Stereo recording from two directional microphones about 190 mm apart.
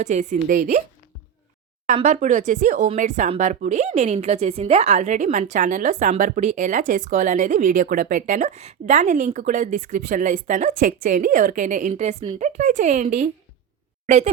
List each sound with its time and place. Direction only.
0.0 s a woman's voice: 40° right (ahead or behind)
2.0 s a woman's voice: 40° right (ahead or behind)